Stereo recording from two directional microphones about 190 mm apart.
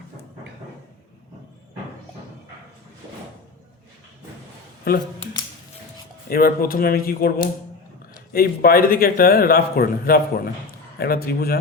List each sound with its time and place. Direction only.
4.9 s a man's voice: 55° left (ahead or behind)
6.2 s a man's voice: 50° left (ahead or behind)